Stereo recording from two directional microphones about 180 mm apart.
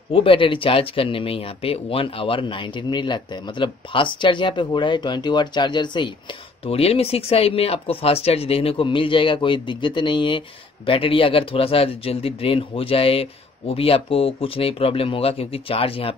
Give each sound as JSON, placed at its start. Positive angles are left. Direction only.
{"t": 0.1, "sound": "speech", "side_deg": 30}